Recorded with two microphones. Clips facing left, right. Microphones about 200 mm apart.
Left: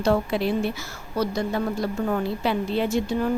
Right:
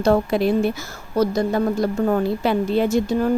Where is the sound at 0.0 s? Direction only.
45° right (ahead or behind).